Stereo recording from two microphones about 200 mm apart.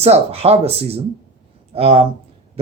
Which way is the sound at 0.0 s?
30° right (ahead or behind).